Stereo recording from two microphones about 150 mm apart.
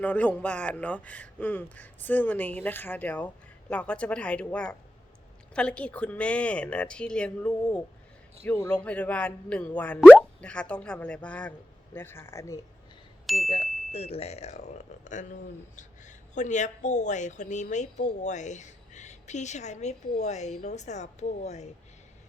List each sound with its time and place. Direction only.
0.0 s speech: 10° left (ahead or behind)
13.2 s speech: centre (ahead or behind)
13.9 s speech: 40° left (ahead or behind)